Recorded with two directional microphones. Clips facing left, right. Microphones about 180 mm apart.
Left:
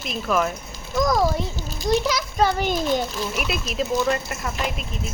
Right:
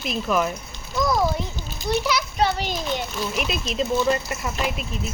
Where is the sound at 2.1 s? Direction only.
45° left (ahead or behind).